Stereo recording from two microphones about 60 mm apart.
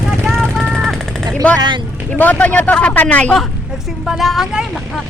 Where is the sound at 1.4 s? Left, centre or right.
Left.